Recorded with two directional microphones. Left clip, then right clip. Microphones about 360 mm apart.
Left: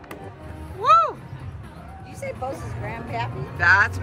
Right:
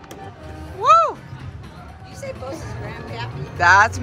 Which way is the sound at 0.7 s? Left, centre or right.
Centre.